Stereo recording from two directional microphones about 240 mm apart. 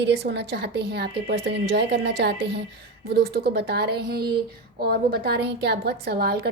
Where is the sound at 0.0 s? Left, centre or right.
Right.